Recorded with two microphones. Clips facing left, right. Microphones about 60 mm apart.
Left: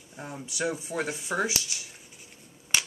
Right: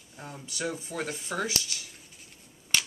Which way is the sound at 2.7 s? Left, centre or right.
Centre.